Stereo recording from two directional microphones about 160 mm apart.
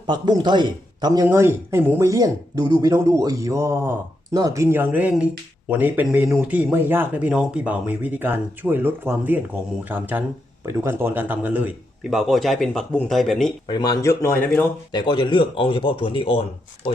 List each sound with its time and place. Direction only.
0.1 s a man's voice: 25° right (ahead or behind); by 11.7 s 10° right (ahead or behind)
12.1 s speech: centre (ahead or behind)
13.7 s speech: 25° left (ahead or behind)
14.9 s speech: 30° left (ahead or behind)